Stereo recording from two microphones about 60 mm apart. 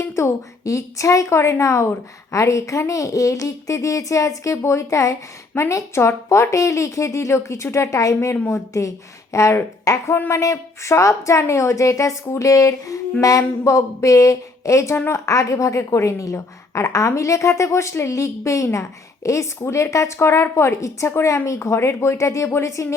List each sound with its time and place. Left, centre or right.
0.0 s a woman's voice: left
7.9 s a woman's voice: left
8.3 s speech: left
10.2 s speech: left
10.4 s a woman's voice: left
18.1 s a woman's voice: left